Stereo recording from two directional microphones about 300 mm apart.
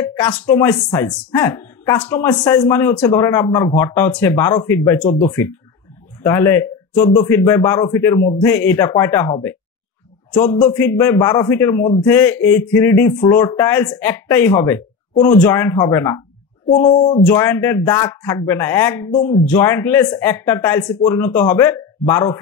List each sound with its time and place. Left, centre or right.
0.0 s a man's voice: centre
10.6 s a man's voice: centre